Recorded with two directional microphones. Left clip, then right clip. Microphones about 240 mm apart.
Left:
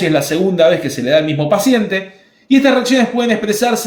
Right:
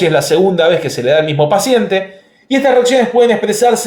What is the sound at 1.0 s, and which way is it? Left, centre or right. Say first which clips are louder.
Speech: right 2 dB; right.